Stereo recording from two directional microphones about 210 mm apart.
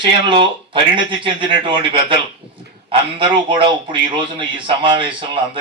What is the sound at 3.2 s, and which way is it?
A man's voice, 20° right (ahead or behind).